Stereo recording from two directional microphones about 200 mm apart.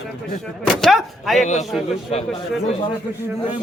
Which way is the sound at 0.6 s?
Centre (ahead or behind).